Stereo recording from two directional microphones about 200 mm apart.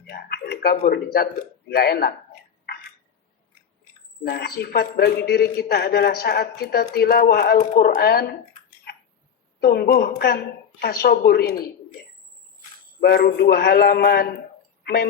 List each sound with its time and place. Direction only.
0.1 s a man's voice: 50° left (ahead or behind)
4.3 s a man's voice: 50° left (ahead or behind)
8.9 s a sound: 50° left (ahead or behind)
9.6 s a man's voice: 55° left (ahead or behind)
13.0 s a man's voice: 55° left (ahead or behind)